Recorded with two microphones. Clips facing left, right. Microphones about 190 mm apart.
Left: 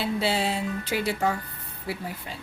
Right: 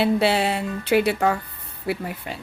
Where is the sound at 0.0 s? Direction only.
65° right (ahead or behind).